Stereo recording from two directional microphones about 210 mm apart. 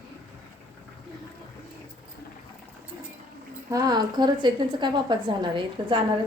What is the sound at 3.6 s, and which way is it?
A woman's voice, 15° right (ahead or behind).